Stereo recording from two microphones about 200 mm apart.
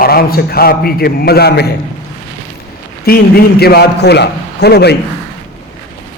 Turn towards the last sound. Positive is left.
turn(degrees=55)  # may be behind; listen again after turning